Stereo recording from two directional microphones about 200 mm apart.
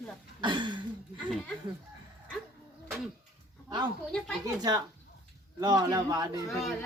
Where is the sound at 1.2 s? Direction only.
Centre (ahead or behind).